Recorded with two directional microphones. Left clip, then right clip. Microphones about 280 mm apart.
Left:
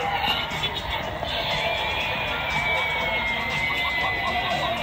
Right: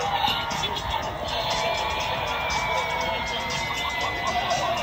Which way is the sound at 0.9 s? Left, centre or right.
Centre.